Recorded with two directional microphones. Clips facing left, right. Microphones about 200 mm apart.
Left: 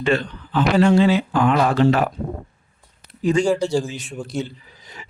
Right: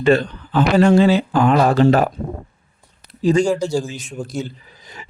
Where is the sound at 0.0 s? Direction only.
40° right (ahead or behind).